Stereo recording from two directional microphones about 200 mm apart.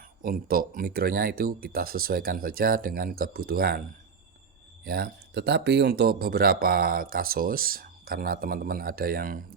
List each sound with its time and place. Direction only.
0.2 s speech: 45° right (ahead or behind)
4.9 s speech: 50° right (ahead or behind)